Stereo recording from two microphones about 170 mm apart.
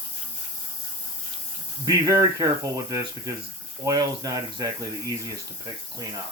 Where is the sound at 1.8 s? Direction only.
20° right (ahead or behind).